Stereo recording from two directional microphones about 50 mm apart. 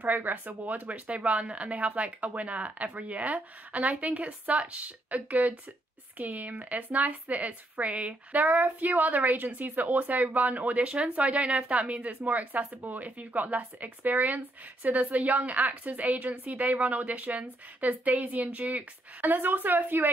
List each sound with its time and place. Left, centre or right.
0.0 s speech: right
1.1 s speech: centre
8.4 s speech: right
19.2 s speech: right